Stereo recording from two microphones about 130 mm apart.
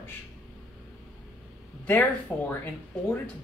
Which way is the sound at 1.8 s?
15° left (ahead or behind).